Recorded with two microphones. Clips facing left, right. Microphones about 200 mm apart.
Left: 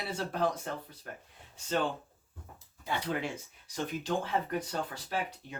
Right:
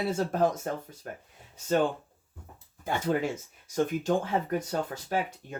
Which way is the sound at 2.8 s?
45° right (ahead or behind).